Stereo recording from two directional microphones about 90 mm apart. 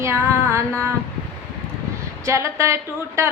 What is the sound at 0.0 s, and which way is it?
Music, 30° right (ahead or behind).